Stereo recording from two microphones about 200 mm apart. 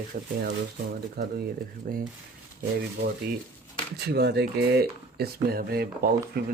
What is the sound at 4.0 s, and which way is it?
Speech, 55° right (ahead or behind).